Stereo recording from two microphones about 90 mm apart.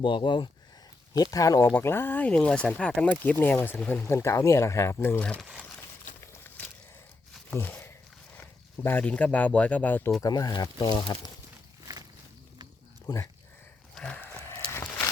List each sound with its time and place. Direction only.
0.0 s speech: 65° left (ahead or behind)
1.2 s speech: 40° left (ahead or behind)
1.7 s speech: 25° left (ahead or behind)
5.4 s speech: 5° right (ahead or behind)
6.3 s walk: 25° left (ahead or behind)
7.5 s a sound: 25° left (ahead or behind)
8.4 s speech: 20° left (ahead or behind)
10.2 s speech: 45° left (ahead or behind)
13.1 s speech: 45° left (ahead or behind)
13.9 s horse: 15° left (ahead or behind)
14.6 s a sound: 10° left (ahead or behind)